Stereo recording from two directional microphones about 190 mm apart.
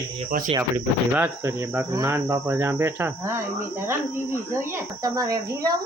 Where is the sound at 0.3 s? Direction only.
45° right (ahead or behind).